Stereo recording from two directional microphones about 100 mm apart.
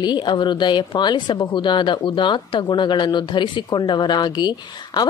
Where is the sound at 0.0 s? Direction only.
50° left (ahead or behind).